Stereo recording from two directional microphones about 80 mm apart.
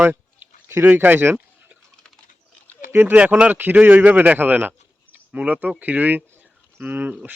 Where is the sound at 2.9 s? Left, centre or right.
Right.